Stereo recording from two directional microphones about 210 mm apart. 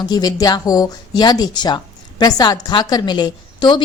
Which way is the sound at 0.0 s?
20° left (ahead or behind).